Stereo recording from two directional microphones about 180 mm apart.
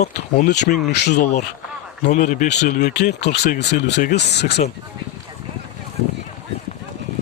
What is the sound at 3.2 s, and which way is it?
Speech, 70° left (ahead or behind).